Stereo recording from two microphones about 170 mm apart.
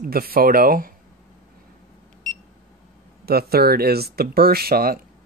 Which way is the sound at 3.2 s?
65° right (ahead or behind).